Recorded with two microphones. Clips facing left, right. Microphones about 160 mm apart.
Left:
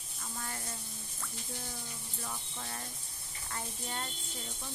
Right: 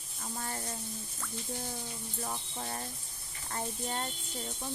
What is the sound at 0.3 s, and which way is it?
Speech, 35° right (ahead or behind).